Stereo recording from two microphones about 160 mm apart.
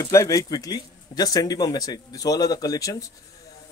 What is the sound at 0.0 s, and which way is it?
Speech, 20° left (ahead or behind).